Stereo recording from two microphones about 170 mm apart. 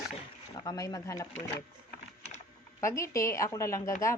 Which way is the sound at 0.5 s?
20° left (ahead or behind).